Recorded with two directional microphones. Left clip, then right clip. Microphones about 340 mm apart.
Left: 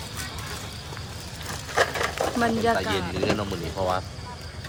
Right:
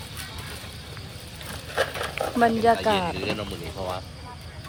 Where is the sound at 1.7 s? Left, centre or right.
Centre.